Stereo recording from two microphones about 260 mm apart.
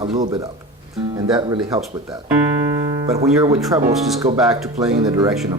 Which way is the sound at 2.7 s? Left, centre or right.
Centre.